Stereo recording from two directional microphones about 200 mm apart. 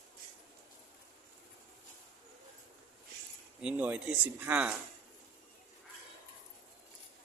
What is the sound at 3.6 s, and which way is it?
Speech, 5° right (ahead or behind).